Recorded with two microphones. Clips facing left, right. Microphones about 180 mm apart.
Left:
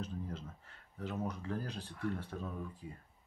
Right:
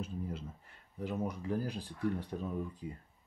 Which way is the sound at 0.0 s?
10° right (ahead or behind).